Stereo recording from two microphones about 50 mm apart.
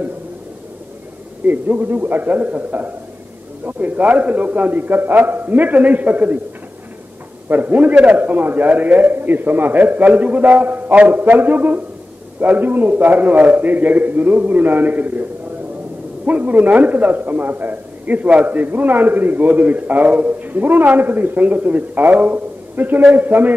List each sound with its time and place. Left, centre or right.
1.4 s a man's voice: right
7.4 s a man's voice: right
7.9 s a man's voice: right
8.2 s a man's voice: right
16.3 s a man's voice: right